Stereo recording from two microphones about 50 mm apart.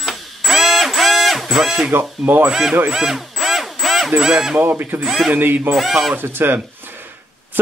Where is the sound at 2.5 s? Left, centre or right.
Centre.